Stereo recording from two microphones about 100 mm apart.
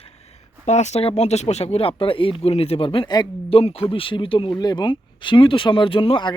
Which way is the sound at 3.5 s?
75° left (ahead or behind).